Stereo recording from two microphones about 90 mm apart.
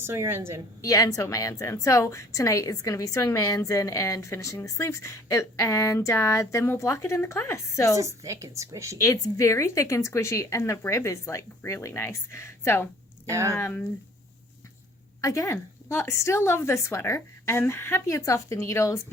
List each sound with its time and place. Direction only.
0.0 s a woman's voice: 25° right (ahead or behind)
0.8 s speech: 40° left (ahead or behind)
7.9 s a woman's voice: 35° right (ahead or behind)
9.0 s speech: 35° left (ahead or behind)
13.3 s a woman's voice: 35° right (ahead or behind)
13.6 s speech: 25° left (ahead or behind)
15.2 s speech: 35° left (ahead or behind)